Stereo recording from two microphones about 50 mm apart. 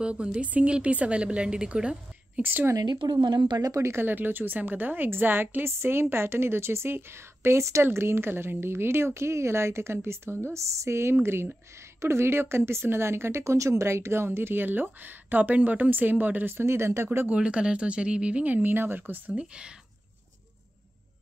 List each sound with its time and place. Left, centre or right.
0.0 s speech: right
2.4 s speech: right
4.0 s speech: right
7.8 s a woman's voice: right
10.5 s speech: right
16.5 s a woman's voice: right
17.3 s speech: right
19.3 s speech: centre